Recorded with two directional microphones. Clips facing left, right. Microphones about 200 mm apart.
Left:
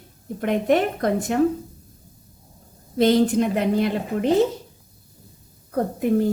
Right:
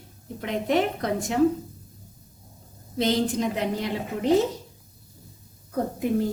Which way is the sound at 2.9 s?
55° left (ahead or behind).